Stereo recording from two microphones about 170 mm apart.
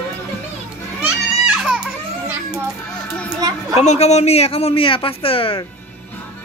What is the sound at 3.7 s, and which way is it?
Speech, 40° left (ahead or behind).